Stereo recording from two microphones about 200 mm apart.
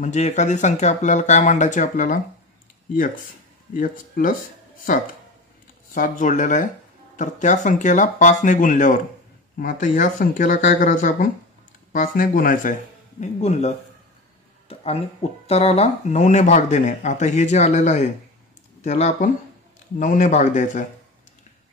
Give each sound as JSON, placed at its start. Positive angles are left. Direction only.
{"t": 0.0, "sound": "speech", "side_deg": 35}
{"t": 3.7, "sound": "speech", "side_deg": 45}
{"t": 5.9, "sound": "speech", "side_deg": 40}